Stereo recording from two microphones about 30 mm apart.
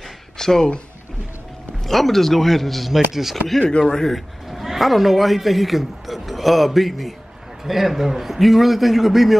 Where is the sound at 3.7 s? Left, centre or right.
Left.